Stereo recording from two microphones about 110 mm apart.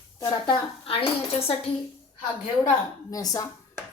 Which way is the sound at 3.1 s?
30° left (ahead or behind).